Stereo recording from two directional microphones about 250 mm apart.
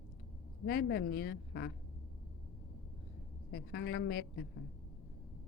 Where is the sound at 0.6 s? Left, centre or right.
Left.